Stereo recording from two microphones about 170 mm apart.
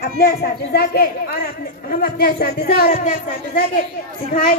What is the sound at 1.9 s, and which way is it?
Speech, 65° left (ahead or behind).